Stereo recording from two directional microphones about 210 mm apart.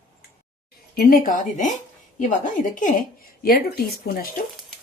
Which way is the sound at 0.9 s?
40° left (ahead or behind).